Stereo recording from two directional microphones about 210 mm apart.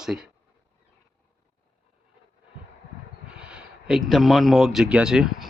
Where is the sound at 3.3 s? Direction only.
5° right (ahead or behind).